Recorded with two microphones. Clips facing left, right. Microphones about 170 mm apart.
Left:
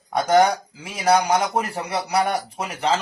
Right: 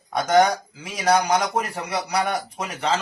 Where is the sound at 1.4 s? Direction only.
30° left (ahead or behind).